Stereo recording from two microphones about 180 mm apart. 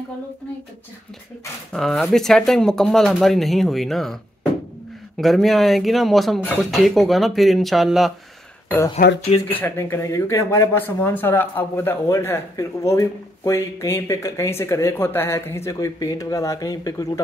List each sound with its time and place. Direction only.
1.7 s speech: 5° left (ahead or behind)
8.6 s speech: 15° left (ahead or behind)